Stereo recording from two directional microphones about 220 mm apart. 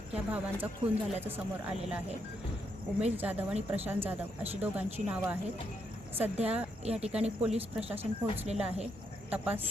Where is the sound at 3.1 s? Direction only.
5° right (ahead or behind).